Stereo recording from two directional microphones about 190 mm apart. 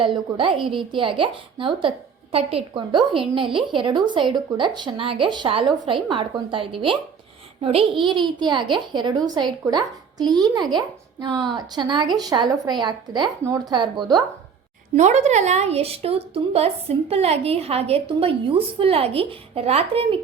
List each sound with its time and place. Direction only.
0.0 s a woman's voice: 25° right (ahead or behind)
14.9 s a woman's voice: 40° right (ahead or behind)